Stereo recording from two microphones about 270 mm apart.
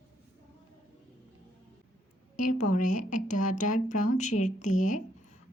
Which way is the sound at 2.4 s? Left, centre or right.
Left.